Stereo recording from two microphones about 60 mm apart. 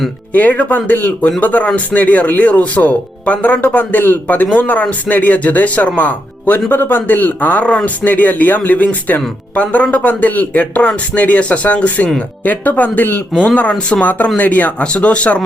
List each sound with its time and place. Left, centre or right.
0.3 s speech: left
13.6 s speech: centre